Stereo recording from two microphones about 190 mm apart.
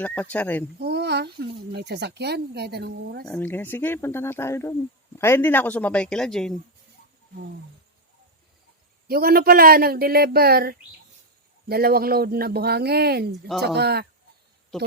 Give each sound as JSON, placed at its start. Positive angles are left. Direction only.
{"t": 0.0, "sound": "speech", "side_deg": 10}
{"t": 0.8, "sound": "speech", "side_deg": -60}
{"t": 3.2, "sound": "speech", "side_deg": 10}
{"t": 9.0, "sound": "speech", "side_deg": -50}